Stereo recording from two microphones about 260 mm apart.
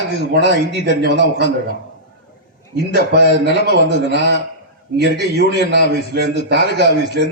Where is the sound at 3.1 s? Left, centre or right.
Right.